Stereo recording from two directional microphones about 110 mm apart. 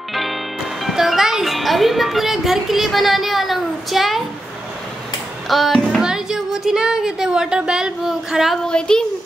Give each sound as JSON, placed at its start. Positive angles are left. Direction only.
{"t": 0.1, "sound": "music", "side_deg": 0}
{"t": 5.5, "sound": "music", "side_deg": 5}
{"t": 5.9, "sound": "speech", "side_deg": -5}
{"t": 8.6, "sound": "a child's voice", "side_deg": 5}